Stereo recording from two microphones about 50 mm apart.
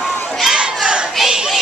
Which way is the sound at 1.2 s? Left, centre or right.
Centre.